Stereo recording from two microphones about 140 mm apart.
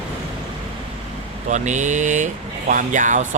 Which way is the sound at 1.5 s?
60° right (ahead or behind).